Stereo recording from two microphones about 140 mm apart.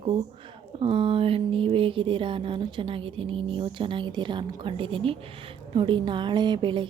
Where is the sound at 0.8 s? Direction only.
40° right (ahead or behind).